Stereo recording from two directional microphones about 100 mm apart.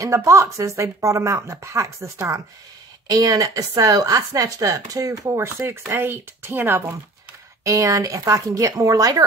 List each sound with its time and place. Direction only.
0.0 s speech: 30° right (ahead or behind)